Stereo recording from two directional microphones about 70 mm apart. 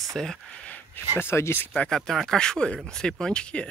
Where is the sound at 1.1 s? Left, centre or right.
Left.